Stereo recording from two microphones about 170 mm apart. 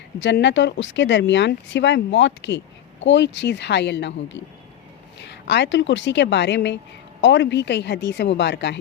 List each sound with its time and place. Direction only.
0.2 s speech: 90° left